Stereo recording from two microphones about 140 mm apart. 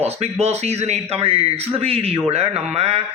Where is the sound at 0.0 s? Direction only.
50° right (ahead or behind).